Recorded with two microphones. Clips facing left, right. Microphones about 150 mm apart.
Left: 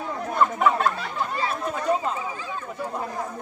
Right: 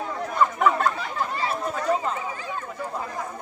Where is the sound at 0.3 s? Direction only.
5° left (ahead or behind).